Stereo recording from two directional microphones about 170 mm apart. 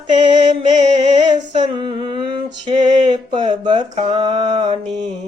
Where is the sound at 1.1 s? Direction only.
25° right (ahead or behind).